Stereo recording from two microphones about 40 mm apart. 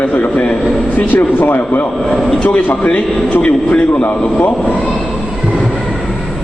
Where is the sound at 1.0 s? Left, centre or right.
Left.